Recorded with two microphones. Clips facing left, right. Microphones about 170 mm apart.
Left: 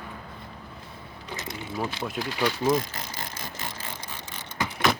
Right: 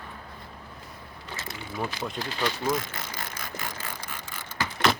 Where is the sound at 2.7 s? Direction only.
30° left (ahead or behind).